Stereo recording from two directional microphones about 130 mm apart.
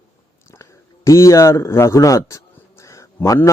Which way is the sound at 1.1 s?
25° left (ahead or behind).